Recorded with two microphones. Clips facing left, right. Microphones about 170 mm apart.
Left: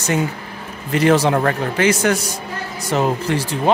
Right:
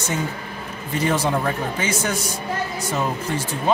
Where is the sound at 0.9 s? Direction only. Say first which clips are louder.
Left 7 dB; 80° left.